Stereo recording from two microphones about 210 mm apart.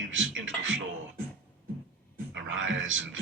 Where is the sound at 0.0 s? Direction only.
65° right (ahead or behind).